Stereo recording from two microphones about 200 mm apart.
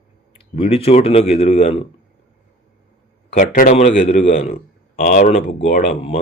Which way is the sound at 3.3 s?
40° left (ahead or behind).